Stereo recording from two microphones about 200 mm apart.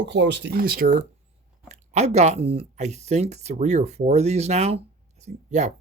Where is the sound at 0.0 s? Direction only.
60° right (ahead or behind).